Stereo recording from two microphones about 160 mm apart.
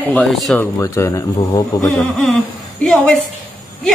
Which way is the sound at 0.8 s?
20° left (ahead or behind).